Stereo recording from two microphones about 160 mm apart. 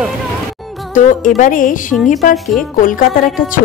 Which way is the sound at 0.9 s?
55° left (ahead or behind).